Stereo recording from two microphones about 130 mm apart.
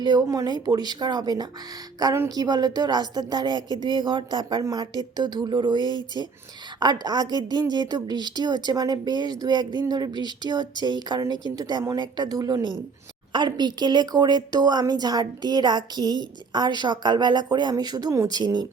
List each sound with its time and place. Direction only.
0.0 s a woman's voice: 30° right (ahead or behind)